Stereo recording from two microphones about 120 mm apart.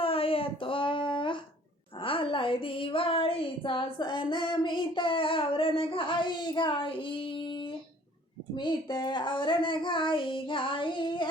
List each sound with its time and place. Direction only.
0.0 s a sound: 50° left (ahead or behind)
2.0 s female singing: 45° left (ahead or behind)
8.5 s child singing: 40° left (ahead or behind)